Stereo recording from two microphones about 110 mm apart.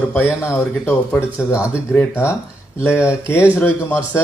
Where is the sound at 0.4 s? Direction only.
20° left (ahead or behind).